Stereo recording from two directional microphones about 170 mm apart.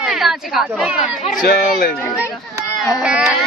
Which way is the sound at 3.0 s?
5° right (ahead or behind).